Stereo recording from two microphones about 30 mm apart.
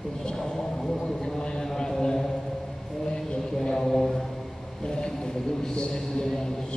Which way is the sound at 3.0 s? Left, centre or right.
Left.